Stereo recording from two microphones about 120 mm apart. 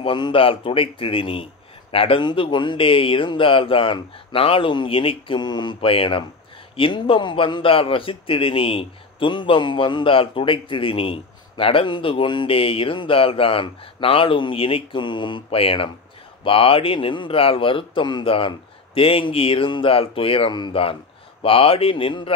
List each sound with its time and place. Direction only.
0.0 s a man's voice: 45° left (ahead or behind)